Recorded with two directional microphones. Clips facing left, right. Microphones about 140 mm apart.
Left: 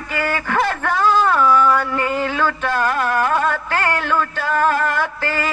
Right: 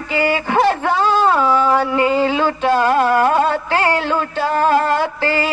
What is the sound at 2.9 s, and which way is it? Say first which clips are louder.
Music: right 5 dB; 20° right (ahead or behind).